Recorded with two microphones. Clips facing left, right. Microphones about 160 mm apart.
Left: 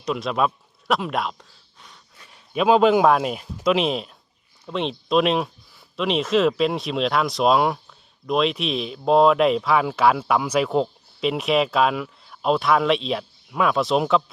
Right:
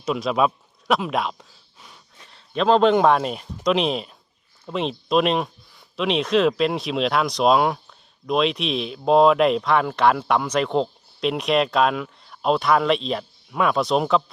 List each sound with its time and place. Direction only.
0.0 s speech: centre (ahead or behind)